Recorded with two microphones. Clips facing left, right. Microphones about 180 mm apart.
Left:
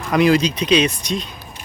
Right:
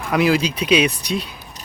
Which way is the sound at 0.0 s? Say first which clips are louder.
Left 2 dB; 5° right (ahead or behind).